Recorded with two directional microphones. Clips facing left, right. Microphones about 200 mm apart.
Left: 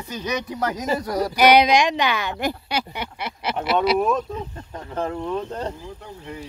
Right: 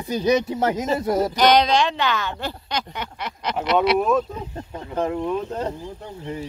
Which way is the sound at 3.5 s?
Centre (ahead or behind).